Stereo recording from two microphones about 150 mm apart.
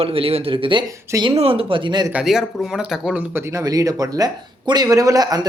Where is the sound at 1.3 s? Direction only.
40° right (ahead or behind).